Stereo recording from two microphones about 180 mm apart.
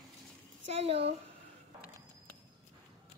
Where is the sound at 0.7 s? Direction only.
35° right (ahead or behind).